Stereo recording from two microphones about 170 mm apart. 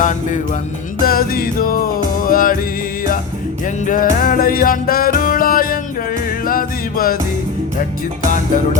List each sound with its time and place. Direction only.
0.0 s music: 50° left (ahead or behind)
3.8 s music: 50° left (ahead or behind)